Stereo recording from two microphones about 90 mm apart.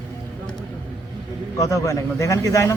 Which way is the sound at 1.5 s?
35° left (ahead or behind).